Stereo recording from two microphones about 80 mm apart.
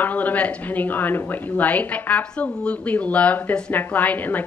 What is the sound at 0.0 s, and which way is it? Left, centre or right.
A woman's voice, left.